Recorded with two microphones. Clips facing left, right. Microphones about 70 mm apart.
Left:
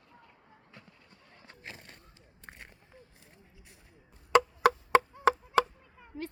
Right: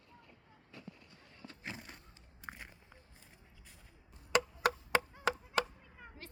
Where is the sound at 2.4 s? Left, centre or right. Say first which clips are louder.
Right 2 dB; centre.